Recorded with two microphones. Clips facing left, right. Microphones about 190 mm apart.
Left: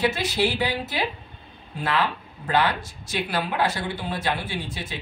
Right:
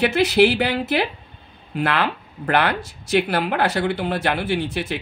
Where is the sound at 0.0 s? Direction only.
65° right (ahead or behind).